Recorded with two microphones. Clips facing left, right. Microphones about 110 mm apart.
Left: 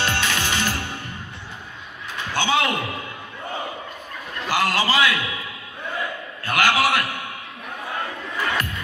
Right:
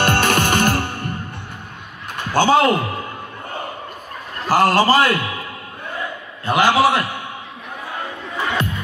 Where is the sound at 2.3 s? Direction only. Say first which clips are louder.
Right 8 dB; 40° right (ahead or behind).